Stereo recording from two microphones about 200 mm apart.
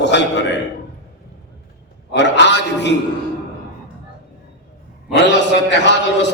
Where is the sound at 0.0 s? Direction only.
60° left (ahead or behind).